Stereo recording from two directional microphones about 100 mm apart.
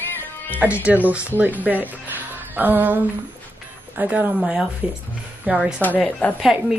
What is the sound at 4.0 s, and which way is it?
Speech, 15° right (ahead or behind).